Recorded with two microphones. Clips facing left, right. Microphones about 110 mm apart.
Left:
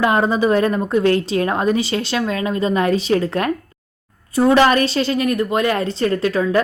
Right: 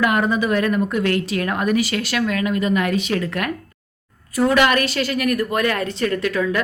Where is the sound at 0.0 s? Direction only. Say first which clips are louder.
Left 3 dB; 30° left (ahead or behind).